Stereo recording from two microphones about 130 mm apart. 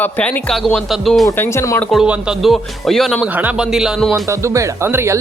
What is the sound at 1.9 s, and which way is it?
Speech, 5° right (ahead or behind).